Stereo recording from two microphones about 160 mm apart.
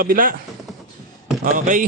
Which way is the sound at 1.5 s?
55° right (ahead or behind).